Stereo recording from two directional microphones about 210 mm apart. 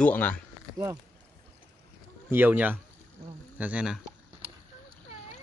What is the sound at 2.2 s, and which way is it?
Speech, 10° right (ahead or behind).